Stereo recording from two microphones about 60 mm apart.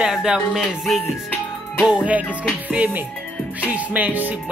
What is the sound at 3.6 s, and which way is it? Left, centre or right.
Music, right.